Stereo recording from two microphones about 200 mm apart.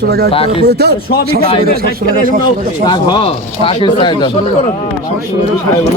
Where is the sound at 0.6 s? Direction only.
55° right (ahead or behind).